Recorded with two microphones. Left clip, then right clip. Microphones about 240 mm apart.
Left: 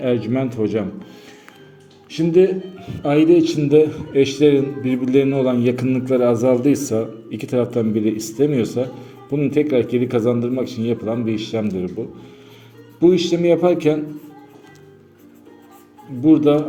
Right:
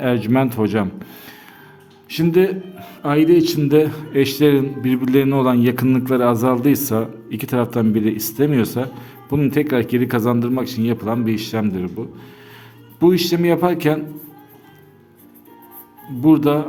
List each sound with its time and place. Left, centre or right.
0.0 s a man's voice: right
13.0 s a man's voice: right
16.2 s a man's voice: right